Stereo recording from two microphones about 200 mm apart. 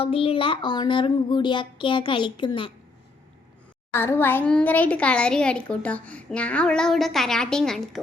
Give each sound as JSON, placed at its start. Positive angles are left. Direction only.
{"t": 0.0, "sound": "a child's voice", "side_deg": 30}
{"t": 3.9, "sound": "a child's voice", "side_deg": 10}